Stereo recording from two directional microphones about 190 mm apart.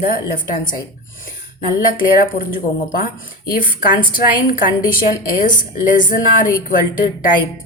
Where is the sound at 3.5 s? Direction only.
50° left (ahead or behind).